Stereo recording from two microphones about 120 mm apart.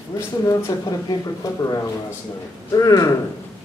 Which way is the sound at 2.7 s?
30° left (ahead or behind).